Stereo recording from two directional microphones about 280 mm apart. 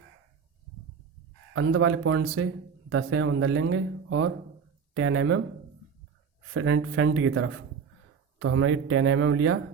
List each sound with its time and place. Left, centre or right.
1.5 s speech: right
6.5 s speech: right